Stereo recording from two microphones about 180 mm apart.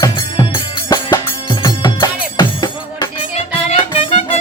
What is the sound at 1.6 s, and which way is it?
Music, 25° left (ahead or behind).